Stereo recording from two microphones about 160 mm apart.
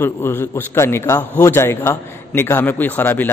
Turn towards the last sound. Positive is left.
turn(degrees=10)  # may be behind; listen again after turning